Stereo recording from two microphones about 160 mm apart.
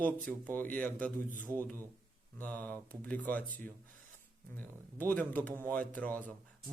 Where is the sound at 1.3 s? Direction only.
55° right (ahead or behind).